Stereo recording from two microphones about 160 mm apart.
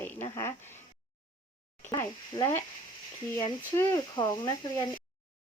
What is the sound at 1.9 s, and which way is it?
Speech, 25° left (ahead or behind).